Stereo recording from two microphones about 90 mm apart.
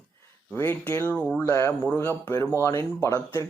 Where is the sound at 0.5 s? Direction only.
25° left (ahead or behind).